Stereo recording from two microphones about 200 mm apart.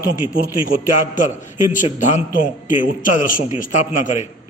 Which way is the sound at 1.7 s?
40° left (ahead or behind).